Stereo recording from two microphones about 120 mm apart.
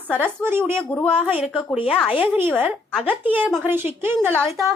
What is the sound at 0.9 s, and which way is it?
A woman's voice, 10° left (ahead or behind).